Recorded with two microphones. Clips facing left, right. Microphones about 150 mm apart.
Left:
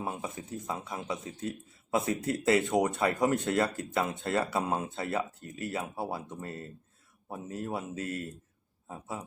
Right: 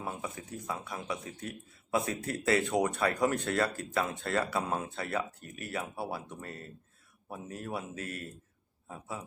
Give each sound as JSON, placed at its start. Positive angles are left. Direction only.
{"t": 0.0, "sound": "speech", "side_deg": 20}